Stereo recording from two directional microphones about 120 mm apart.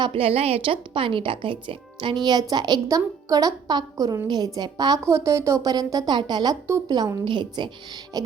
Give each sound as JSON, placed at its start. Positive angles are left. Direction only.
{"t": 0.0, "sound": "a woman's voice", "side_deg": -55}
{"t": 6.7, "sound": "a woman's voice", "side_deg": -25}
{"t": 6.9, "sound": "a woman's voice", "side_deg": -35}